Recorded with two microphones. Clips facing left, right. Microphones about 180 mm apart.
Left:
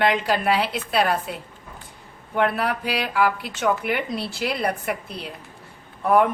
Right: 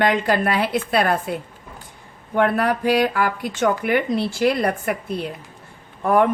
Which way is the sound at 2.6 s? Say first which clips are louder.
Right 7 dB; 50° right (ahead or behind).